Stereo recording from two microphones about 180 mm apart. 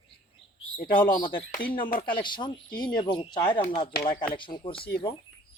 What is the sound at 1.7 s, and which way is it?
Speech, 50° left (ahead or behind).